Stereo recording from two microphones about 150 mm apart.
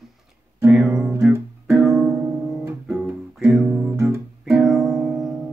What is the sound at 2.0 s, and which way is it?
Music, 20° right (ahead or behind).